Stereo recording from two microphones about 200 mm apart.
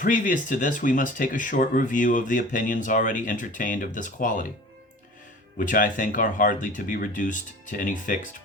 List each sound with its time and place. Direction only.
0.0 s speech: 40° left (ahead or behind)
5.5 s speech: 45° left (ahead or behind)